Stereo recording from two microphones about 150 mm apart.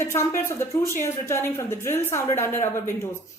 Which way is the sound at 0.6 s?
20° left (ahead or behind).